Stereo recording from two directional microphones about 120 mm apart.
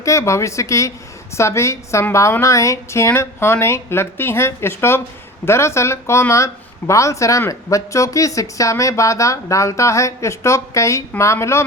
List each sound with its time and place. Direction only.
0.0 s speech: 25° left (ahead or behind)